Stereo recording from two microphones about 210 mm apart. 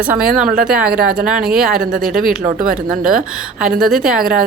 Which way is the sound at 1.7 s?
45° right (ahead or behind).